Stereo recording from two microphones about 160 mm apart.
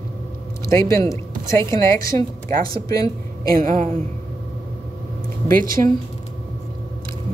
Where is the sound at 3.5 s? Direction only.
60° right (ahead or behind).